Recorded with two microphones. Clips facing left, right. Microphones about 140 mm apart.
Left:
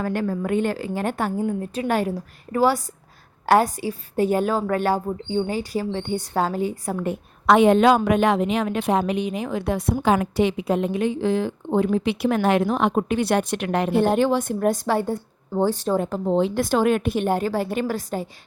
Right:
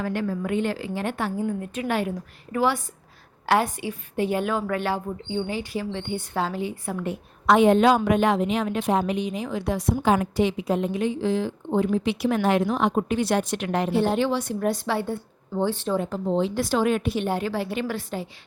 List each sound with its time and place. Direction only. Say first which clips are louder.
0.0 s a woman's voice: left 2 dB; 45° left (ahead or behind)
7.4 s a woman's voice: left 2 dB; 75° left (ahead or behind)
10.2 s a woman's voice: left 2 dB; 65° left (ahead or behind); by 18.3 s 45° left (ahead or behind)